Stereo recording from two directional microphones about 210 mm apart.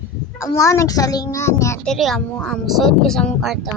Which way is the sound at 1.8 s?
Centre (ahead or behind).